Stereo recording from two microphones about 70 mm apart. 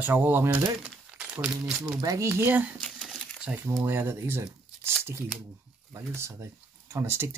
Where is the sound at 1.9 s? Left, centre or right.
Right.